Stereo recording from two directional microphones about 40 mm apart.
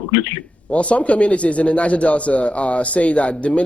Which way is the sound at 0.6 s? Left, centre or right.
Left.